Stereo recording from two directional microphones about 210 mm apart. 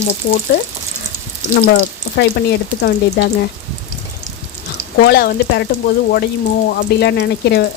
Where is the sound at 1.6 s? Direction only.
50° left (ahead or behind).